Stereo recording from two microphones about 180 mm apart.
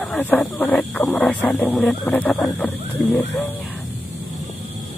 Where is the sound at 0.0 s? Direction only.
5° left (ahead or behind).